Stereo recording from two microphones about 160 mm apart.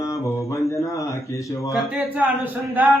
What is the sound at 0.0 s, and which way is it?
Mantra, 20° left (ahead or behind).